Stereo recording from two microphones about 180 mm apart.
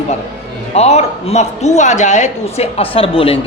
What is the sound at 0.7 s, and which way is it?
A man's voice, 35° left (ahead or behind).